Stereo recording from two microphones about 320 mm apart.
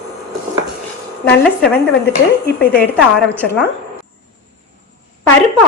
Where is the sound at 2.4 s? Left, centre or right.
Left.